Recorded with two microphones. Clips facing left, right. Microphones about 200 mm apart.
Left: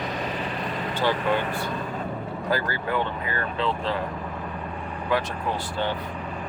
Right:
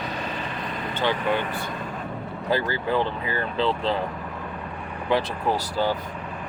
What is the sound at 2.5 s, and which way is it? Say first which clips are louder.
Speech: right 3 dB; 25° right (ahead or behind).